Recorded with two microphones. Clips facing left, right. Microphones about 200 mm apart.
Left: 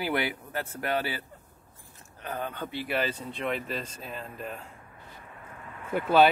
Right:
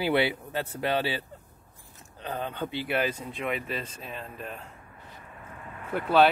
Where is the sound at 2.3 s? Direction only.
15° right (ahead or behind).